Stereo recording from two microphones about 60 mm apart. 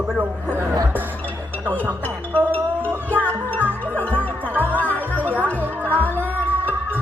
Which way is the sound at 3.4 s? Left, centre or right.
Right.